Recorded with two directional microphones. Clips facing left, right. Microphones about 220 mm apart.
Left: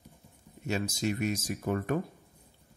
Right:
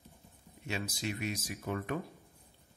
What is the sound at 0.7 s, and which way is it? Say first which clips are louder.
Speech: left 7 dB; 45° left (ahead or behind).